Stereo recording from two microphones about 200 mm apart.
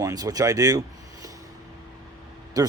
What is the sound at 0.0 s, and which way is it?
Speech, 20° right (ahead or behind).